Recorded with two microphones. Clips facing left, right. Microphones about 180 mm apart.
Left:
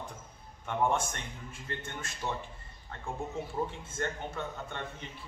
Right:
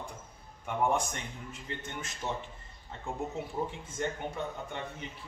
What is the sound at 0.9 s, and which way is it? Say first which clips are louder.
A man's voice: right 1 dB; 15° right (ahead or behind).